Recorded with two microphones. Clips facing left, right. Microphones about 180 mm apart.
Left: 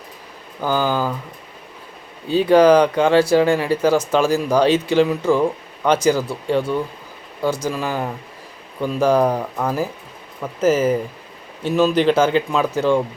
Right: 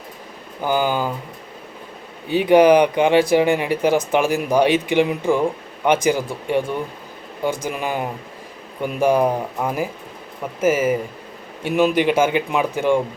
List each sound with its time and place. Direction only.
0.6 s speech: 15° right (ahead or behind)
2.3 s speech: 15° right (ahead or behind)